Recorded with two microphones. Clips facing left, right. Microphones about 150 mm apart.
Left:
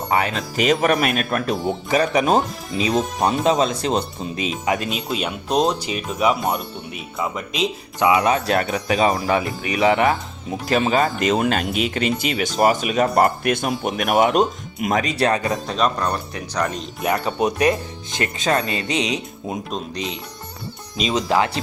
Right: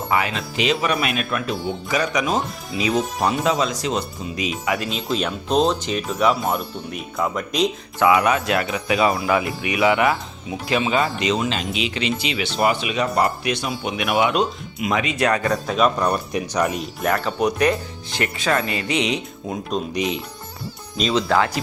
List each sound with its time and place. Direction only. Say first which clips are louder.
0.1 s speech: left 2 dB; 40° left (ahead or behind)
1.9 s speech: left 4 dB; 30° left (ahead or behind)
2.9 s speech: left 1 dB; centre (ahead or behind)
3.4 s speech: left 3 dB; 25° left (ahead or behind)
5.0 s speech: right 1 dB; 5° left (ahead or behind)
7.9 s speech: even; 20° left (ahead or behind)
10.7 s speech: left 2 dB; 45° left (ahead or behind)
15.6 s speech: right 2 dB; 5° right (ahead or behind)
17.1 s speech: even; 20° left (ahead or behind)
19.9 s speech: right 5 dB; 15° right (ahead or behind)
21.1 s speech: even; 20° left (ahead or behind)